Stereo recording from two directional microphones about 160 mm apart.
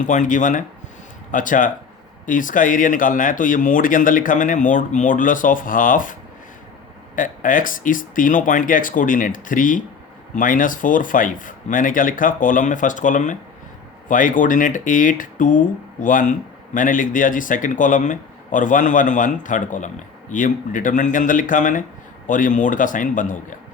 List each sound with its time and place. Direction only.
0.0 s speech: 50° left (ahead or behind)
7.2 s speech: 55° left (ahead or behind)